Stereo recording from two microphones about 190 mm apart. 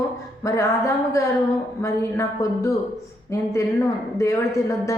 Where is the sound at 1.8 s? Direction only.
15° left (ahead or behind).